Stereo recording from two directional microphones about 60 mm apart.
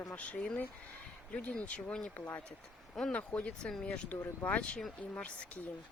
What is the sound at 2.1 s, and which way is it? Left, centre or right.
Speech, left.